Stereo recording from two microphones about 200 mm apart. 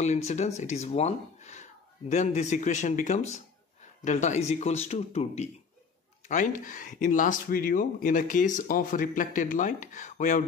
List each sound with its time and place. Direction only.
0.0 s speech: 35° left (ahead or behind)